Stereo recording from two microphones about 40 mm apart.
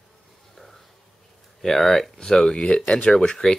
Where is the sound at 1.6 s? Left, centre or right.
Centre.